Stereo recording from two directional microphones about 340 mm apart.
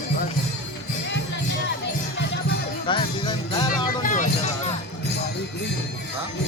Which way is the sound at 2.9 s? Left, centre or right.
Centre.